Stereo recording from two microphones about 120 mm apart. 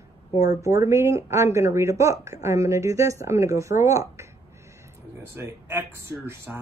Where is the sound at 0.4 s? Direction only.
25° right (ahead or behind).